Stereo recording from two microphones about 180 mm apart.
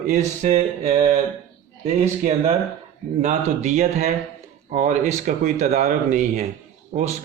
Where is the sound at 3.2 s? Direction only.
40° right (ahead or behind).